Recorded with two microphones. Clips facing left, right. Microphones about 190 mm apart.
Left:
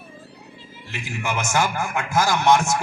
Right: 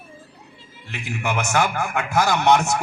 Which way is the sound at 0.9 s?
60° right (ahead or behind).